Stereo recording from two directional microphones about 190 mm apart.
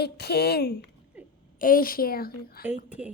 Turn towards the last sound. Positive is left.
turn(degrees=-5)  # may be behind; listen again after turning